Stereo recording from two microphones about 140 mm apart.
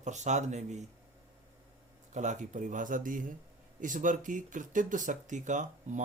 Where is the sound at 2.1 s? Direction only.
60° right (ahead or behind).